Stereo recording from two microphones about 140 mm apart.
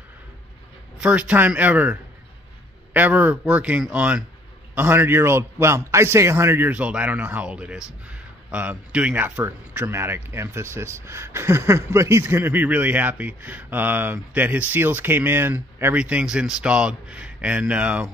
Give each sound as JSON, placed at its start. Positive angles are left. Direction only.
{"t": 1.0, "sound": "speech", "side_deg": -10}